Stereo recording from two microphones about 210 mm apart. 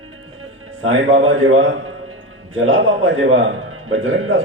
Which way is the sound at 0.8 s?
70° right (ahead or behind).